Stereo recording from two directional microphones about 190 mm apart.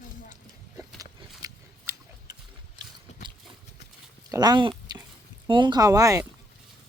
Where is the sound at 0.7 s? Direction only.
15° right (ahead or behind).